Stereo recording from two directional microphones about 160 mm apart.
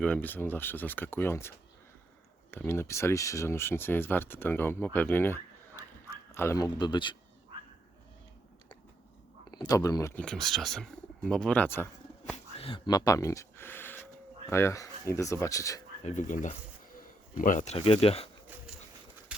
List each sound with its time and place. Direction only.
0.0 s speech: 10° left (ahead or behind); by 7.2 s 30° left (ahead or behind)
9.5 s speech: 25° left (ahead or behind)
10.2 s speech: 5° left (ahead or behind)
12.5 s speech: 35° left (ahead or behind)
16.0 s speech: 50° left (ahead or behind)
17.7 s speech: 35° left (ahead or behind)